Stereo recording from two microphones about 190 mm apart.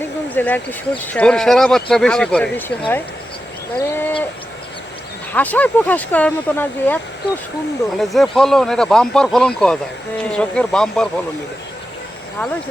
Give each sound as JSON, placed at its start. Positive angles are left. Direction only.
{"t": 0.0, "sound": "speech", "side_deg": 10}
{"t": 3.8, "sound": "bird", "side_deg": 20}
{"t": 5.3, "sound": "speech", "side_deg": 10}